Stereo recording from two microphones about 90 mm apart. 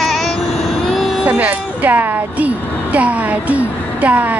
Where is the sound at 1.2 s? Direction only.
15° right (ahead or behind).